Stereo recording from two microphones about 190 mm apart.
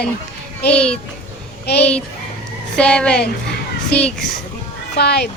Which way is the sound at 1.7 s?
60° left (ahead or behind).